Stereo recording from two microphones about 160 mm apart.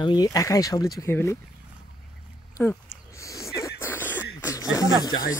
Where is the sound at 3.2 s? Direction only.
20° left (ahead or behind).